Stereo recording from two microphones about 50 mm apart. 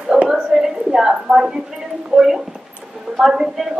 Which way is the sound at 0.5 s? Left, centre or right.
Centre.